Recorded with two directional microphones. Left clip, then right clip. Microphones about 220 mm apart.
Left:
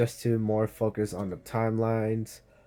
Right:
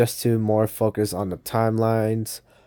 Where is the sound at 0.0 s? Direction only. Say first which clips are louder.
Right 6 dB; 45° right (ahead or behind).